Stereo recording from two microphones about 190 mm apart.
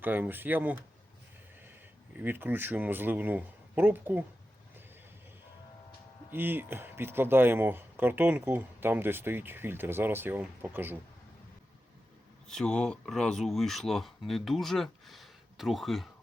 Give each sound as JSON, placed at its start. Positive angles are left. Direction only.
{"t": 0.0, "sound": "speech", "side_deg": -10}
{"t": 2.1, "sound": "speech", "side_deg": -10}
{"t": 6.3, "sound": "speech", "side_deg": -10}
{"t": 12.5, "sound": "speech", "side_deg": 5}